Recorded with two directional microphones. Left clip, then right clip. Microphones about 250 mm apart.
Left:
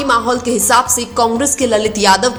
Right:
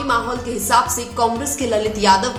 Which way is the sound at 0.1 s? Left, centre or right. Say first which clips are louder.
Left 6 dB; left.